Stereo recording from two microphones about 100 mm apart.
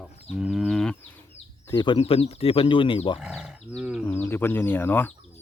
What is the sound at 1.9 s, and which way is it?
Speech, 75° left (ahead or behind).